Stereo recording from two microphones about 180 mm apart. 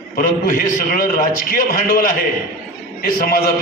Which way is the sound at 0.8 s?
50° left (ahead or behind).